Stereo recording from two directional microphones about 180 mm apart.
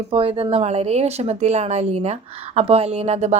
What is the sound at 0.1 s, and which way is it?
A woman's voice, 30° right (ahead or behind).